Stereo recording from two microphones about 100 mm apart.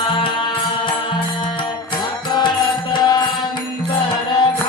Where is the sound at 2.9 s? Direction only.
45° left (ahead or behind).